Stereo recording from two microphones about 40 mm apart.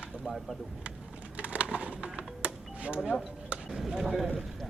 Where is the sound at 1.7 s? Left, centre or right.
Right.